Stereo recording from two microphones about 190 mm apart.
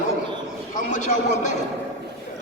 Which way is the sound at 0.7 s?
40° left (ahead or behind).